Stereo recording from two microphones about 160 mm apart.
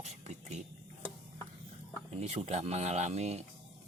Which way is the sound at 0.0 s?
45° right (ahead or behind).